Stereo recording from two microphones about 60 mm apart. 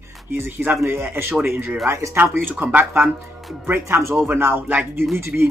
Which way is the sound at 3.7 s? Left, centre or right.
Right.